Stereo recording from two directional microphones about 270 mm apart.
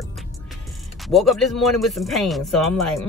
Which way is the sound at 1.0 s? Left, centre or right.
Centre.